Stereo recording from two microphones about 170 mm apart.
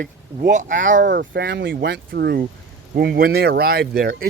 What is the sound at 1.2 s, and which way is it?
Speech, 70° right (ahead or behind).